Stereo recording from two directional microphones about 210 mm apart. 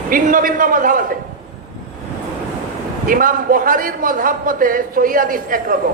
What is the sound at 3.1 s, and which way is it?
A man's voice, 40° right (ahead or behind).